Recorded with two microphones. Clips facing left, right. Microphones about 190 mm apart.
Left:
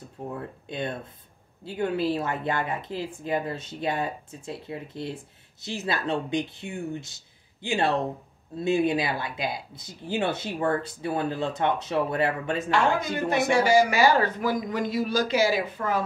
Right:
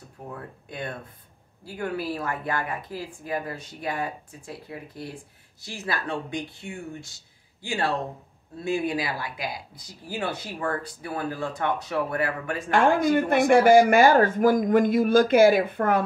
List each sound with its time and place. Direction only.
0.3 s speech: 25° left (ahead or behind)
12.7 s speech: 50° right (ahead or behind)